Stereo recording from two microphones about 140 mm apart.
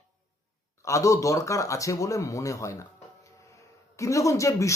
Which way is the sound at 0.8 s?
20° left (ahead or behind).